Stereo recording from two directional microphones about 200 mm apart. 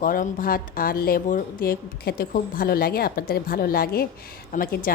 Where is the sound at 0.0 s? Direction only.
45° left (ahead or behind).